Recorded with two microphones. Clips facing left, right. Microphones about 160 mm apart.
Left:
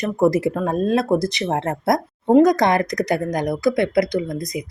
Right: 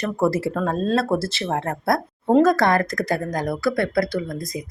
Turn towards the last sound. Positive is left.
turn(degrees=20)  # may be behind; listen again after turning